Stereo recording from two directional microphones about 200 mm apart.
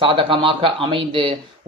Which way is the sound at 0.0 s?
25° right (ahead or behind).